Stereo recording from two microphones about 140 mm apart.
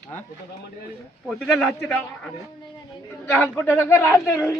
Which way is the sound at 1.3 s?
Centre (ahead or behind).